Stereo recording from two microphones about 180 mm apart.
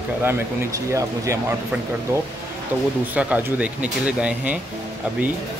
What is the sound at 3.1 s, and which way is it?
Speech, 10° right (ahead or behind).